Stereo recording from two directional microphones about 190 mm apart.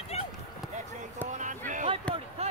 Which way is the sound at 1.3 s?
40° right (ahead or behind).